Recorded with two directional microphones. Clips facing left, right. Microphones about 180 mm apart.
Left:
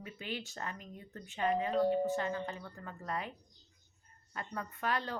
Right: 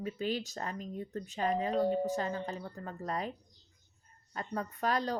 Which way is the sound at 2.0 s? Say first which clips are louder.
Right 1 dB; 40° right (ahead or behind).